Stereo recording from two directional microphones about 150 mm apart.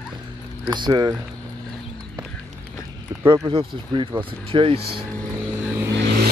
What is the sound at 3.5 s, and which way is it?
Speech, 35° right (ahead or behind).